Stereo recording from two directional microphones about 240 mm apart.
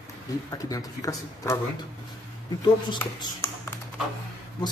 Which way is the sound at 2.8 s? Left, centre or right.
Centre.